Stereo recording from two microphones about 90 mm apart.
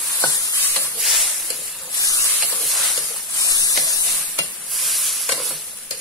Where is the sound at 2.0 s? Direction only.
40° left (ahead or behind).